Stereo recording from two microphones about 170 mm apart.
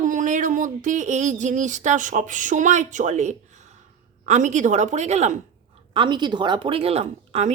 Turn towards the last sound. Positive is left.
turn(degrees=-40)  # may be behind; listen again after turning